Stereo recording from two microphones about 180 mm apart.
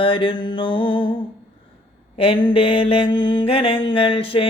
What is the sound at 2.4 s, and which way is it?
Mantra, 30° left (ahead or behind).